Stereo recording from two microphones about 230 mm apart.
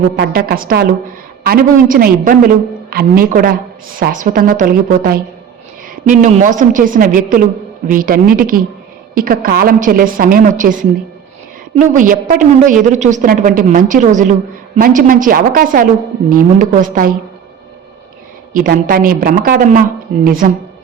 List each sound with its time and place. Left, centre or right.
0.2 s a woman's voice: right
11.9 s a woman's voice: right
18.5 s a woman's voice: right